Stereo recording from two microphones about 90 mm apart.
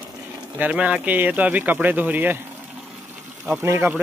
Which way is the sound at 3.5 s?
25° right (ahead or behind).